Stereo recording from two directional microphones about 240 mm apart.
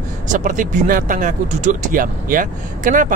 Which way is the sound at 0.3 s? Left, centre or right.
Right.